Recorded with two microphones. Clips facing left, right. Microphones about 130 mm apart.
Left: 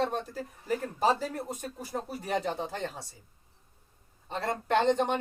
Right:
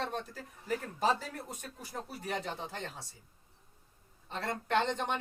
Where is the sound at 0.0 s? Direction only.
35° left (ahead or behind).